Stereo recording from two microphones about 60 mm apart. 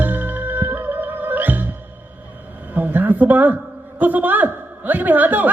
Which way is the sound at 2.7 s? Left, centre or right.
Right.